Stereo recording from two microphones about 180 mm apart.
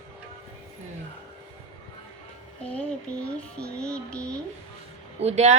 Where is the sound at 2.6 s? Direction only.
5° left (ahead or behind).